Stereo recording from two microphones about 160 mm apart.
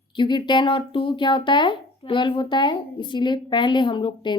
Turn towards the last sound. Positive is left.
turn(degrees=30)  # may be behind; listen again after turning